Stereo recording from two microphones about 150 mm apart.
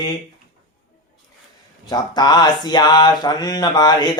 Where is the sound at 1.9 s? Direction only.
25° left (ahead or behind).